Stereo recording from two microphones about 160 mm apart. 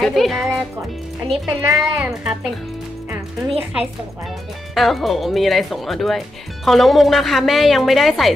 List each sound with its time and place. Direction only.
0.0 s speech: centre (ahead or behind)
1.6 s a woman's voice: 15° right (ahead or behind)
3.1 s music: 10° right (ahead or behind)
4.7 s speech: centre (ahead or behind)